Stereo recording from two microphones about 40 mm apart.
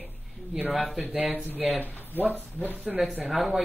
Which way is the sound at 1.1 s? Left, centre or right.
Right.